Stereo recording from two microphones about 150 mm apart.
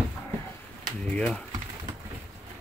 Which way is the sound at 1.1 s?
5° left (ahead or behind).